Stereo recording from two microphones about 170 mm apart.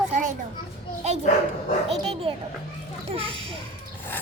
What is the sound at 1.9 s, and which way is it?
Dog, 35° right (ahead or behind).